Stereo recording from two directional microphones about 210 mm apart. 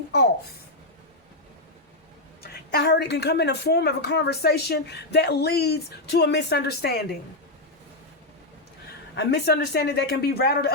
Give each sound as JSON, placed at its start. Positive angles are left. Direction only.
{"t": 2.7, "sound": "speech", "side_deg": 50}
{"t": 8.9, "sound": "speech", "side_deg": 50}